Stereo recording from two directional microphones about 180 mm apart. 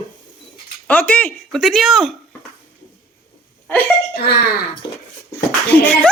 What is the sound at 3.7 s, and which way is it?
Laughter, 10° left (ahead or behind).